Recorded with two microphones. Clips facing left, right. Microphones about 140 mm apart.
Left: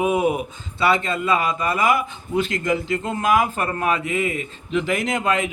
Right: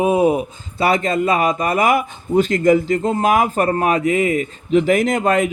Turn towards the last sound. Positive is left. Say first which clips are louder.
# right 5 dB
turn(degrees=-40)  # may be behind; listen again after turning